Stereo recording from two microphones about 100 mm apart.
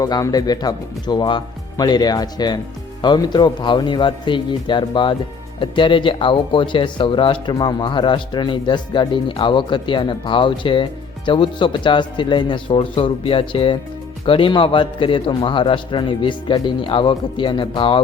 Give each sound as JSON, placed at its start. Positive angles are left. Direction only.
{"t": 0.0, "sound": "a man's voice", "side_deg": 40}